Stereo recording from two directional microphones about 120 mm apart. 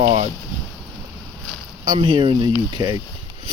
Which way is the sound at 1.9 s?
45° right (ahead or behind).